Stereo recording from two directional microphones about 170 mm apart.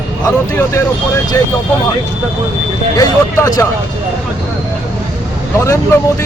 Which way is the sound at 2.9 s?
20° left (ahead or behind).